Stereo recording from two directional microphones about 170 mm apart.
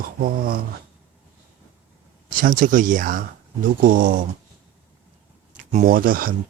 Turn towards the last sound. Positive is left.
turn(degrees=-55)  # may be behind; listen again after turning